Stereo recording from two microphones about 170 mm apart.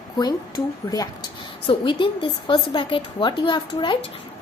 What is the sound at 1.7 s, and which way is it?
A woman's voice, 30° left (ahead or behind).